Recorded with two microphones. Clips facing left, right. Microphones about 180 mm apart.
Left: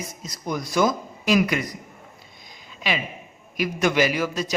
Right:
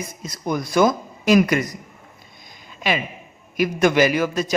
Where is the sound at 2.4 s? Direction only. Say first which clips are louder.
Right 4 dB; 50° right (ahead or behind).